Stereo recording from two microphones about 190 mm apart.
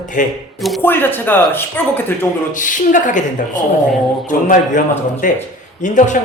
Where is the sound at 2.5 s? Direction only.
45° left (ahead or behind).